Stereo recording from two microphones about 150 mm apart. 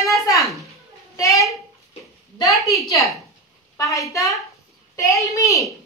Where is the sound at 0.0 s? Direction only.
20° left (ahead or behind).